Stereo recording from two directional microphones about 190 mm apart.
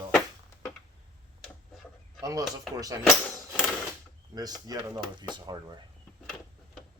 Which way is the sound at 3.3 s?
Centre (ahead or behind).